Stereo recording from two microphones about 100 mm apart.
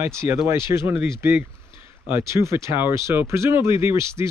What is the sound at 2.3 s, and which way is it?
Speech, 30° right (ahead or behind).